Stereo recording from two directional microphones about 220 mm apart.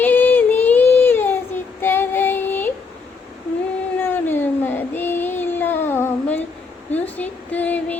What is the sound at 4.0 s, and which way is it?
Child singing, 10° left (ahead or behind).